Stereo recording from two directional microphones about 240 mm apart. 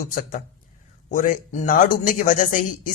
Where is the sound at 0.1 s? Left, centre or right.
Left.